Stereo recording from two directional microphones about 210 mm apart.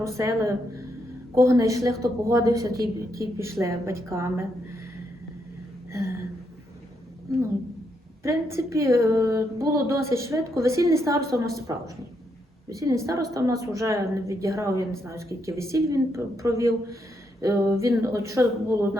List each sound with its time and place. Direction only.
0.0 s a woman's voice: 15° right (ahead or behind)
5.9 s a sound: 15° right (ahead or behind)
8.2 s a woman's voice: 15° right (ahead or behind)
12.6 s a woman's voice: 15° right (ahead or behind)